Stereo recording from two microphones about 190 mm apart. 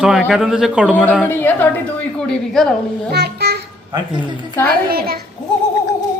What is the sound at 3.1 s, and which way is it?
Speech, 60° right (ahead or behind).